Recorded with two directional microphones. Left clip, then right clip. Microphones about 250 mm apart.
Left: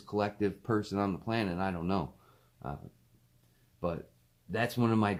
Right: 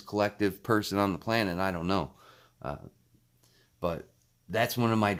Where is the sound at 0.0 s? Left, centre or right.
Right.